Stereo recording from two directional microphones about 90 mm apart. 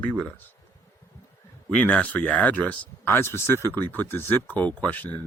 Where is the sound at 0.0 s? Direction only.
15° left (ahead or behind).